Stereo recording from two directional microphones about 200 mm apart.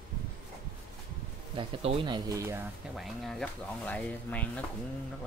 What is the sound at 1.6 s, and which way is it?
Speech, 30° right (ahead or behind).